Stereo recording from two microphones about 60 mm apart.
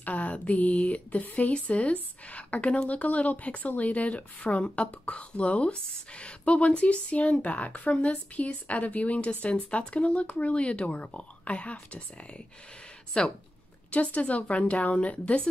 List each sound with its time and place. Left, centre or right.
0.0 s speech: left
13.2 s speech: centre